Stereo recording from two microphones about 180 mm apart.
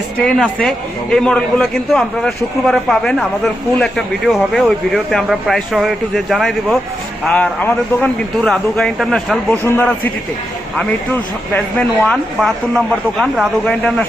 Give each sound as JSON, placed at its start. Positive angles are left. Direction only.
{"t": 0.3, "sound": "a man's voice", "side_deg": 5}